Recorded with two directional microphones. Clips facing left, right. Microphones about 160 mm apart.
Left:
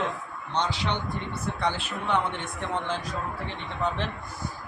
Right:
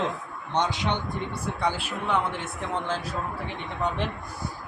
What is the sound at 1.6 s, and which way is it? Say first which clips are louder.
Speech: right 1 dB; 5° right (ahead or behind).